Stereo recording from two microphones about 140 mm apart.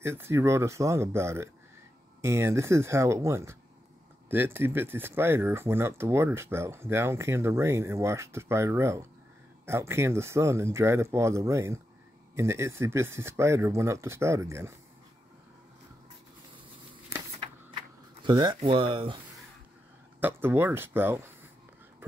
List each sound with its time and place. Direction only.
0.0 s speech: 15° right (ahead or behind)
17.4 s a sound: 40° right (ahead or behind)
18.2 s speech: 30° right (ahead or behind)
20.2 s speech: 15° right (ahead or behind)